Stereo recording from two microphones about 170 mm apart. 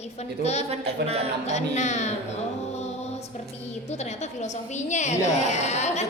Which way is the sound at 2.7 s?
40° left (ahead or behind).